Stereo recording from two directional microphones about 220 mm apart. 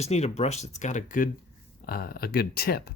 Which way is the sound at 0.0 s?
30° left (ahead or behind).